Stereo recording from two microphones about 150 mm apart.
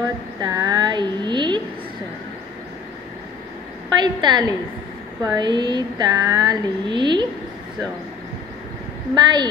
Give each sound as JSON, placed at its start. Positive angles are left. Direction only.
{"t": 0.4, "sound": "a woman's voice", "side_deg": -25}
{"t": 4.0, "sound": "speech", "side_deg": -30}
{"t": 9.1, "sound": "speech", "side_deg": -30}